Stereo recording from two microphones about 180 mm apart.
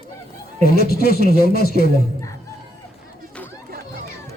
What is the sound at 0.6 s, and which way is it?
Speech, 60° left (ahead or behind).